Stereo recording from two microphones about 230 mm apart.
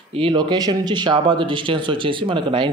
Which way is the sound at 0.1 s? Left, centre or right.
Right.